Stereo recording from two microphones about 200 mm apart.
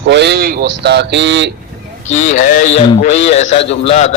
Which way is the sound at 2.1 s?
35° left (ahead or behind).